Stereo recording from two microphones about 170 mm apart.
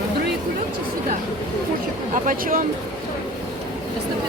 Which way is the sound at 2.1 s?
50° right (ahead or behind).